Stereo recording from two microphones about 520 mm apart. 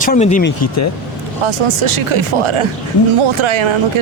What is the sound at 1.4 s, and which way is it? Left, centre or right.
Speech, right.